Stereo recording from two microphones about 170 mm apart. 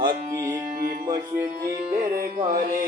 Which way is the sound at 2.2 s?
55° right (ahead or behind).